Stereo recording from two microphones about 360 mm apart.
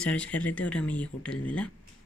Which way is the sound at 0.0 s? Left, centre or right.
Centre.